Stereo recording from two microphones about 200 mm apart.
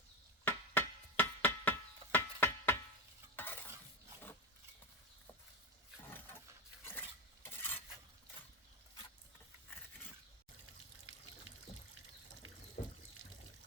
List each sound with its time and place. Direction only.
0.4 s knock: 10° left (ahead or behind)
2.1 s a sound: 10° left (ahead or behind)
3.3 s stir: 10° left (ahead or behind)
6.1 s a sound: 10° left (ahead or behind)
7.5 s cutlery: 10° left (ahead or behind)
12.8 s trickle: 40° left (ahead or behind)